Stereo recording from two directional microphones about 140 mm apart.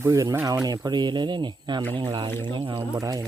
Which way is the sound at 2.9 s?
25° right (ahead or behind).